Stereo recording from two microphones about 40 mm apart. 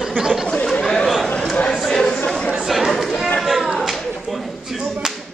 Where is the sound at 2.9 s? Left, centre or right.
Centre.